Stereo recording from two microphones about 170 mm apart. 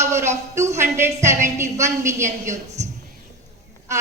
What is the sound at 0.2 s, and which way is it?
A woman's voice, 15° right (ahead or behind).